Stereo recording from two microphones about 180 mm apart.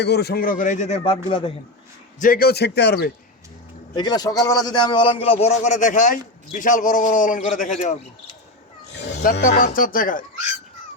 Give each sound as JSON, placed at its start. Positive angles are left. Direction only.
{"t": 0.0, "sound": "speech", "side_deg": 65}
{"t": 2.2, "sound": "a man's voice", "side_deg": 55}
{"t": 3.9, "sound": "a man's voice", "side_deg": 20}
{"t": 9.5, "sound": "speech", "side_deg": 50}